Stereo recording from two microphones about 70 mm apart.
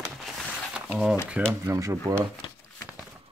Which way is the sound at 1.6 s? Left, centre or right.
Right.